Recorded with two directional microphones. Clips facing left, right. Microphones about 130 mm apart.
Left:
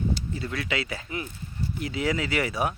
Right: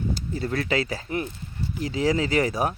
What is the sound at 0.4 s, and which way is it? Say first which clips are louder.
Speech: right 6 dB; 40° right (ahead or behind).